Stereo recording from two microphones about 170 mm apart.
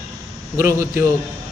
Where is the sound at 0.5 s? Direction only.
15° right (ahead or behind).